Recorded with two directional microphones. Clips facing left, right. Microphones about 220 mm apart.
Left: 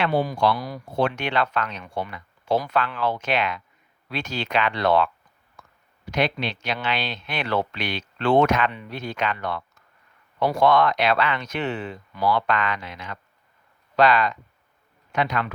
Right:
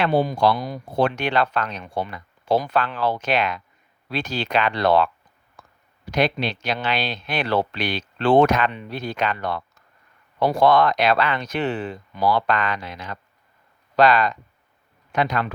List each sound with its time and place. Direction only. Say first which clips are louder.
0.1 s speech: right 3 dB; 20° right (ahead or behind)
0.9 s speech: right 2 dB; 35° right (ahead or behind)
5.6 s clicking: right 1 dB; 35° right (ahead or behind)
6.1 s speech: right 3 dB; 40° right (ahead or behind)